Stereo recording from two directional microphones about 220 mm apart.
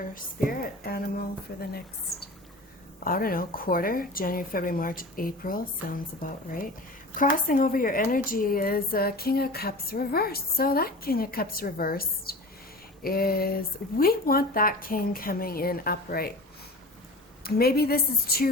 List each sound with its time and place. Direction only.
0.1 s a woman's voice: 40° left (ahead or behind)
3.0 s a woman's voice: 40° left (ahead or behind)
17.4 s a woman's voice: 45° left (ahead or behind)